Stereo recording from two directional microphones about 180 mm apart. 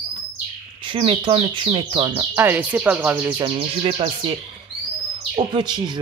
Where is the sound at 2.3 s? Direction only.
10° right (ahead or behind).